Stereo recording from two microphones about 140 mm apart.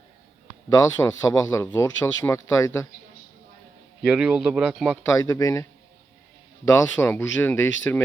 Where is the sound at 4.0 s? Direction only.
5° right (ahead or behind).